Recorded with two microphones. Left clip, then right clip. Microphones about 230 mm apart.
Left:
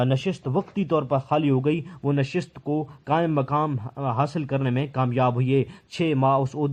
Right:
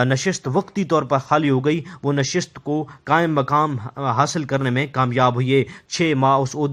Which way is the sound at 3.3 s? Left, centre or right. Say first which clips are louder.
Right 6 dB; right.